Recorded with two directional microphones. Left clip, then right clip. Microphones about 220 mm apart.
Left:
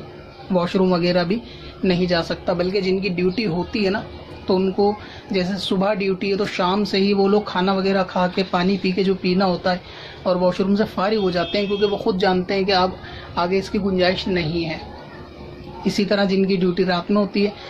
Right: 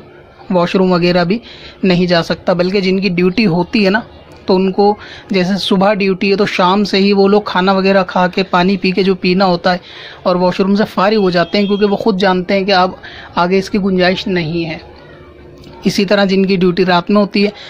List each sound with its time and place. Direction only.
0.5 s speech: 40° right (ahead or behind)
15.8 s speech: 45° right (ahead or behind)